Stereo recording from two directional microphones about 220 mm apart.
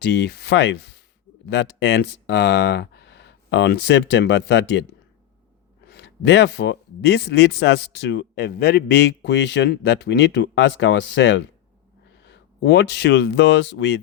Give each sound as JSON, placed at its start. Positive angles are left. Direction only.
{"t": 0.0, "sound": "speech", "side_deg": 50}
{"t": 5.9, "sound": "speech", "side_deg": 50}